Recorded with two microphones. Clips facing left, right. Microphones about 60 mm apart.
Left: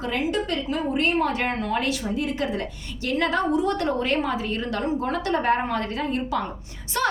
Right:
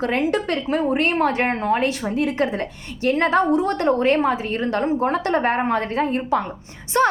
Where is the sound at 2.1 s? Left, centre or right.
Right.